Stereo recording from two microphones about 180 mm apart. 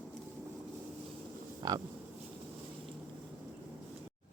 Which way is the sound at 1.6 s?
20° right (ahead or behind).